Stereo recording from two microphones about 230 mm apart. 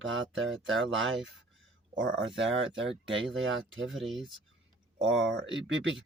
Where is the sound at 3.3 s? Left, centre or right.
Right.